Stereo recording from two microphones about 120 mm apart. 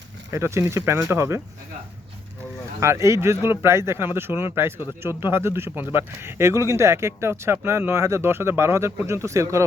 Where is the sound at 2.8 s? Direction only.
25° right (ahead or behind).